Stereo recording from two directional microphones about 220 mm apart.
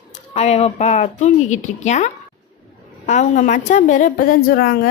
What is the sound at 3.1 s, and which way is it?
A woman's voice, 35° left (ahead or behind).